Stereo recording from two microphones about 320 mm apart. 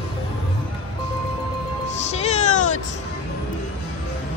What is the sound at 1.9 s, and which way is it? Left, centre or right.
Music, left.